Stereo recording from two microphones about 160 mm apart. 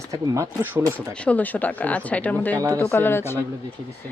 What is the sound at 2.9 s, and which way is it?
Speech, 15° left (ahead or behind).